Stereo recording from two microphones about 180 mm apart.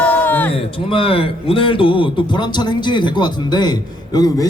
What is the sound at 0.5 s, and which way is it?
A man's voice, 30° left (ahead or behind).